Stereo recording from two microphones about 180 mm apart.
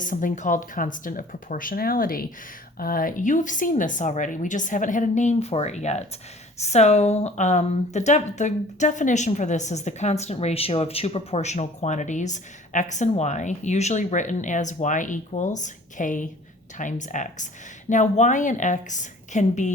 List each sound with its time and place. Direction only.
0.0 s speech: 45° left (ahead or behind)